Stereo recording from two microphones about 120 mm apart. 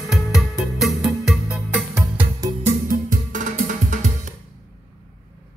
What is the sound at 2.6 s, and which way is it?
Music, 90° right.